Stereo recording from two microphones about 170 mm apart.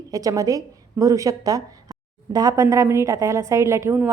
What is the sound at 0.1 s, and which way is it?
A woman's voice, 20° right (ahead or behind).